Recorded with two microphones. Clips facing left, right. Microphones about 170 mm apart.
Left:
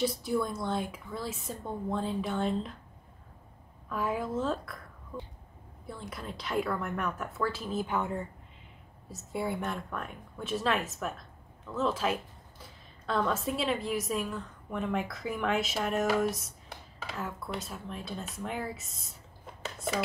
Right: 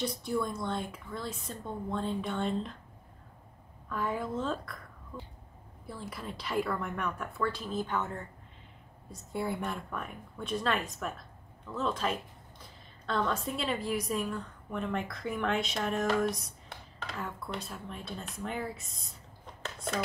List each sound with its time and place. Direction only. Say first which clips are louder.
0.2 s a woman's voice: left 2 dB; centre (ahead or behind)
3.9 s a woman's voice: left 2 dB; 5° left (ahead or behind)
5.9 s a woman's voice: even; centre (ahead or behind)